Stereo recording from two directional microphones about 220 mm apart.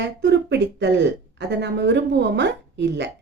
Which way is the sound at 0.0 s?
50° right (ahead or behind).